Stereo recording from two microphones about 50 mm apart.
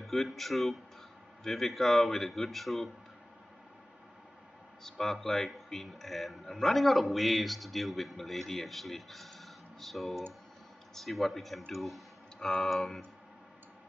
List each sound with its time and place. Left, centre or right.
0.0 s a man's voice: centre
4.8 s a man's voice: centre
12.4 s speech: centre
12.6 s a man's voice: centre